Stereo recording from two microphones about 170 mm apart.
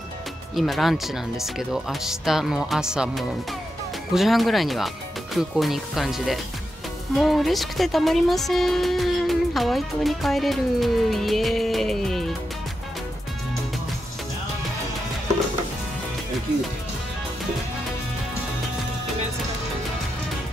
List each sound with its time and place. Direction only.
0.6 s speech: centre (ahead or behind)